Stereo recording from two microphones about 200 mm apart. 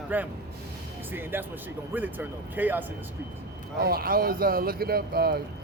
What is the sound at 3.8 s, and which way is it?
Speech, 50° right (ahead or behind).